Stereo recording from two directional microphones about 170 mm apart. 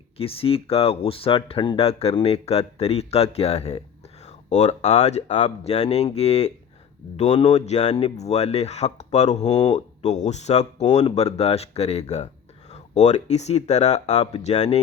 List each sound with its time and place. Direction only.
0.2 s speech: 35° left (ahead or behind)